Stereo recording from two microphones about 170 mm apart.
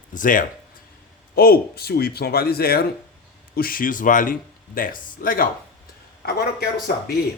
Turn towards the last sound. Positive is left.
turn(degrees=60)  # may be behind; listen again after turning